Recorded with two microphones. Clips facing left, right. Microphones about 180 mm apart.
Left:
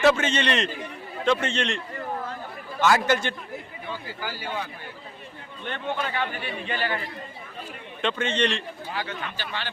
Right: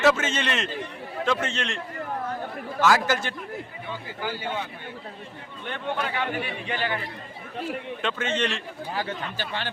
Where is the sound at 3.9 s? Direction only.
20° right (ahead or behind).